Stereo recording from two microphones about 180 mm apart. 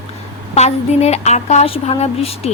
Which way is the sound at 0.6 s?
35° left (ahead or behind).